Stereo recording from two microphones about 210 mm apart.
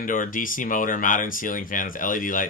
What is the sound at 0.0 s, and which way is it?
Speech, 40° left (ahead or behind).